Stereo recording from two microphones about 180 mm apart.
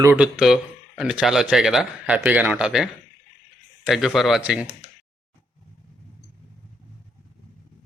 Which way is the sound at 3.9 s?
Centre (ahead or behind).